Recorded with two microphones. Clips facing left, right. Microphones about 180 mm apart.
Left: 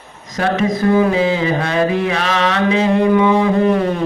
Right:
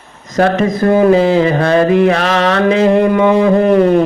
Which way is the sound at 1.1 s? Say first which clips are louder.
Right 6 dB; 55° right (ahead or behind).